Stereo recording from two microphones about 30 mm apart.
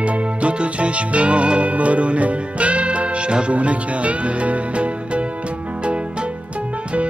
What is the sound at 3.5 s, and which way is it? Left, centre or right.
Speech, right.